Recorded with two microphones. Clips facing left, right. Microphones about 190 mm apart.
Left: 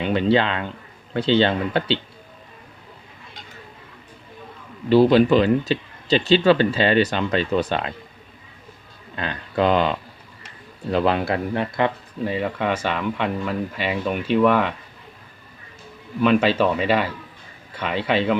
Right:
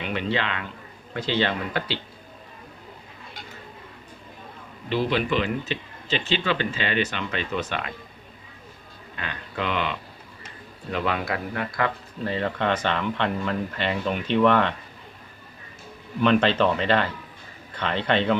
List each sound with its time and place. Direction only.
0.0 s speech: 35° left (ahead or behind)
4.9 s speech: 35° left (ahead or behind)
9.1 s speech: 35° left (ahead or behind)
10.9 s speech: 30° left (ahead or behind)
12.3 s speech: 10° left (ahead or behind)
16.2 s speech: 5° left (ahead or behind)